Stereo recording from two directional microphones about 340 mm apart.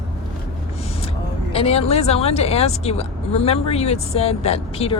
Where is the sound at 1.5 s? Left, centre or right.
Centre.